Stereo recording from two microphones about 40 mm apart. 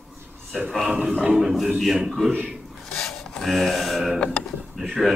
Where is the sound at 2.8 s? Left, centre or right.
Centre.